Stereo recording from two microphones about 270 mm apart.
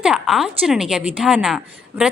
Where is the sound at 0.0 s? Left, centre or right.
Centre.